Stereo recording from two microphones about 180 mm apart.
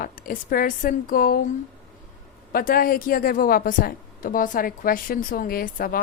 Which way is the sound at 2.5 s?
55° left (ahead or behind).